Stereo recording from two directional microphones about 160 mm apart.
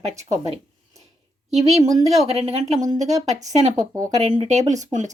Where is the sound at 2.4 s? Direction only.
45° right (ahead or behind).